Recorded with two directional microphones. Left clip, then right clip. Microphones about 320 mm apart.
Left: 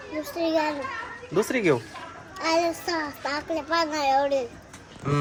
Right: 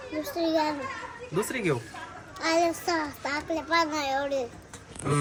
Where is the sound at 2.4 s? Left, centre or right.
Centre.